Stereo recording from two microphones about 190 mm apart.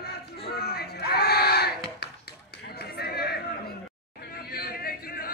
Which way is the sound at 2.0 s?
55° left (ahead or behind).